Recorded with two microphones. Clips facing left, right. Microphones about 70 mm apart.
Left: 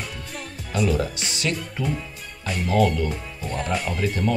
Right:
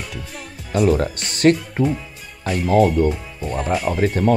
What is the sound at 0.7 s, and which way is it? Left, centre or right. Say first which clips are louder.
Speech: right 6 dB; right.